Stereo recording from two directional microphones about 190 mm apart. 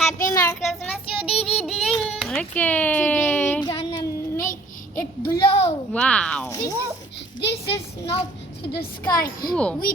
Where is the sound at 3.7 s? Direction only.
25° left (ahead or behind).